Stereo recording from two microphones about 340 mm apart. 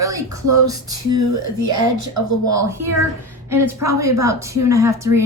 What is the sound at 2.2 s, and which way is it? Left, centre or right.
Speech, right.